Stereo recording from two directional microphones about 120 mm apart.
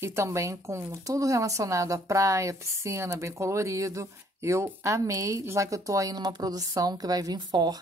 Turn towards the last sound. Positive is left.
turn(degrees=-35)  # may be behind; listen again after turning